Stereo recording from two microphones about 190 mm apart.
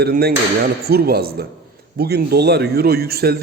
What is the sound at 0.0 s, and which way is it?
A man's voice, 55° right (ahead or behind).